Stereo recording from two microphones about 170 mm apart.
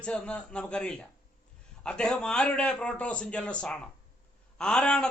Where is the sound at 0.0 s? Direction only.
5° left (ahead or behind).